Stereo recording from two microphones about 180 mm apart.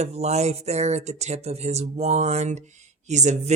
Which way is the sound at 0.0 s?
35° right (ahead or behind).